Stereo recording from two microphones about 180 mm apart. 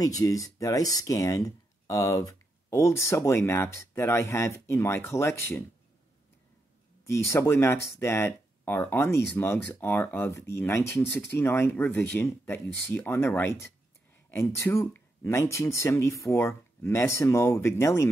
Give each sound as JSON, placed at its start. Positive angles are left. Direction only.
{"t": 0.0, "sound": "speech", "side_deg": 20}
{"t": 7.1, "sound": "speech", "side_deg": 15}